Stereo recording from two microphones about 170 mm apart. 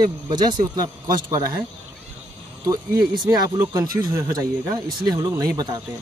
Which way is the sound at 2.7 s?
25° right (ahead or behind).